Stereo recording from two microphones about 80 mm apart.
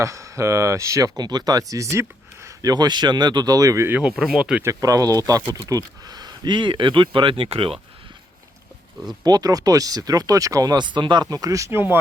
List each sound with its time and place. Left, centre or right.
0.0 s speech: right
2.6 s speech: right
3.8 s speech: centre
4.2 s speech: centre
4.6 s speech: right
9.2 s speech: right
10.8 s speech: right
11.3 s speech: right
11.7 s speech: right